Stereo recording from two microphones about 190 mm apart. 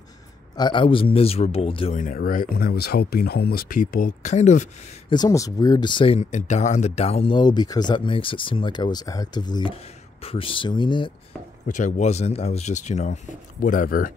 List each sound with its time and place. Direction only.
0.6 s speech: 25° left (ahead or behind)
2.0 s speech: 45° left (ahead or behind)
5.1 s speech: 20° left (ahead or behind)
11.6 s speech: 40° left (ahead or behind)